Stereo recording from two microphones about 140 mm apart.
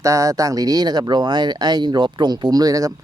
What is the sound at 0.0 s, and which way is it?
Speech, 25° right (ahead or behind).